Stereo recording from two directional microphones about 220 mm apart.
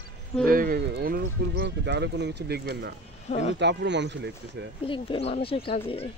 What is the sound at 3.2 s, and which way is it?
Speech, 30° left (ahead or behind).